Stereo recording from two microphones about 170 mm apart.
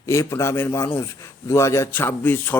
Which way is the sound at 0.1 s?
15° left (ahead or behind).